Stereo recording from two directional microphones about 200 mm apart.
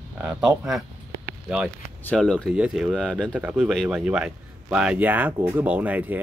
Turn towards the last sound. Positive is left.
turn(degrees=-10)  # may be behind; listen again after turning